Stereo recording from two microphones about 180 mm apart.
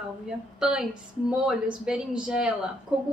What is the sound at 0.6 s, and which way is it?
A woman's voice, 5° right (ahead or behind).